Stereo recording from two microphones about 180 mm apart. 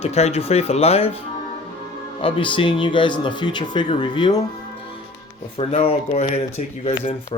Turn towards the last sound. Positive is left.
turn(degrees=30)  # may be behind; listen again after turning